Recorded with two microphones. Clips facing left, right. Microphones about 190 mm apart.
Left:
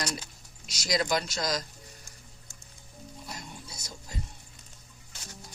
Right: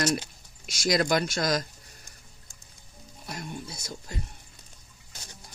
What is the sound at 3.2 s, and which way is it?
Music, 60° right (ahead or behind).